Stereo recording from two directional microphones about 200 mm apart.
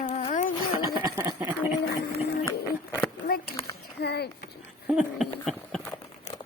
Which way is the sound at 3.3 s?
55° left (ahead or behind).